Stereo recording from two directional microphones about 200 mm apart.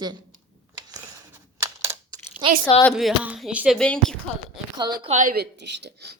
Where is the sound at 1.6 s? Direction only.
15° right (ahead or behind).